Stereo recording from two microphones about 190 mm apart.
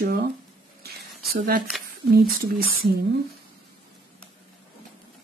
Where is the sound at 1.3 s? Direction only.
50° right (ahead or behind).